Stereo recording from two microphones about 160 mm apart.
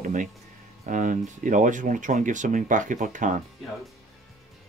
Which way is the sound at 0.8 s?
55° right (ahead or behind).